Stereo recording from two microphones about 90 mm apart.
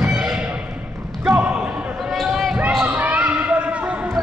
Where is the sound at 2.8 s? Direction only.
15° right (ahead or behind).